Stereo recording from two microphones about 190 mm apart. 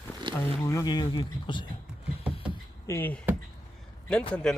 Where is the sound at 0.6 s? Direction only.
20° left (ahead or behind).